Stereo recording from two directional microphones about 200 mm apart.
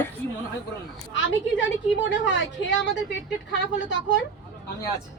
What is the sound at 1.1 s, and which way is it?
Speech, 65° left (ahead or behind).